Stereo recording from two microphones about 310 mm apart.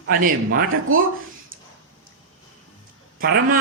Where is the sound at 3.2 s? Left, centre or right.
Right.